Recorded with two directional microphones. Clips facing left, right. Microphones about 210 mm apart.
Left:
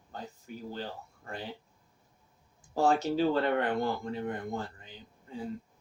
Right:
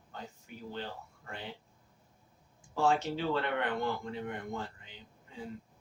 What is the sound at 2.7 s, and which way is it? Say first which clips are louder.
Speech: left 3 dB; 40° left (ahead or behind).